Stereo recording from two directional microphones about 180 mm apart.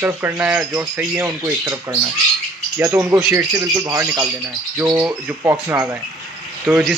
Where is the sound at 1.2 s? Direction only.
20° right (ahead or behind).